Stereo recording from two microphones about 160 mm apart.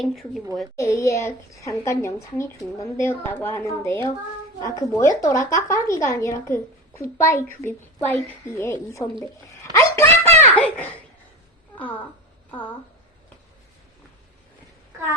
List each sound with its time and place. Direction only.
0.0 s a woman's voice: centre (ahead or behind)
0.8 s a woman's voice: 20° left (ahead or behind)
9.7 s a sound: 15° left (ahead or behind)
10.5 s a child's voice: 10° left (ahead or behind)